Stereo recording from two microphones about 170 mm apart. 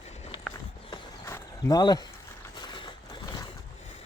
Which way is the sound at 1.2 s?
15° left (ahead or behind).